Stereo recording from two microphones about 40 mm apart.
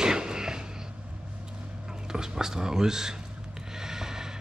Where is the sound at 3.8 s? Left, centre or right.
Centre.